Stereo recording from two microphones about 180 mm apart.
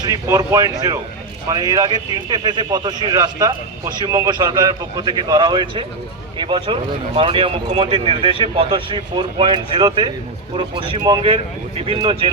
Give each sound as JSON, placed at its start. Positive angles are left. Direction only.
{"t": 0.0, "sound": "speech", "side_deg": -20}